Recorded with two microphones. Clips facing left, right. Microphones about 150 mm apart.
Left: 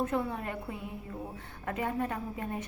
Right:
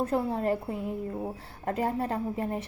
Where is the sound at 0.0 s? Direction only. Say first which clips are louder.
Right 4 dB; 35° right (ahead or behind).